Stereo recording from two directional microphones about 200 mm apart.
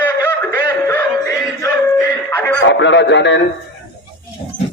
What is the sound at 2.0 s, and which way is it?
Dog, 10° left (ahead or behind).